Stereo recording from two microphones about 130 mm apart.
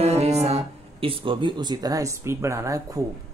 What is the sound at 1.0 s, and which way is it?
Speech, 45° right (ahead or behind).